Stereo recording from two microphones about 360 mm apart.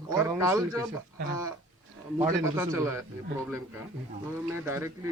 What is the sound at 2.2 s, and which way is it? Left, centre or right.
Speech, centre.